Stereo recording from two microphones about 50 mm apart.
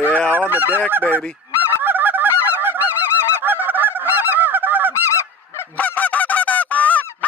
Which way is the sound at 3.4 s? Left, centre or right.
Right.